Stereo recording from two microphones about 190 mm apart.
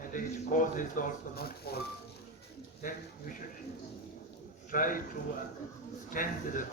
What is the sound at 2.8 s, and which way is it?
Speech, 45° left (ahead or behind).